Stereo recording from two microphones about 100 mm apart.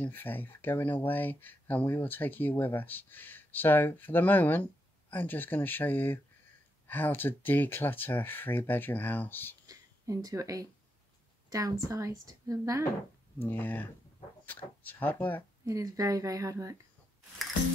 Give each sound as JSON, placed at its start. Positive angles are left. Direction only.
{"t": 0.0, "sound": "speech", "side_deg": 20}
{"t": 9.7, "sound": "a woman's voice", "side_deg": -35}
{"t": 13.4, "sound": "speech", "side_deg": 20}
{"t": 15.6, "sound": "a woman's voice", "side_deg": -35}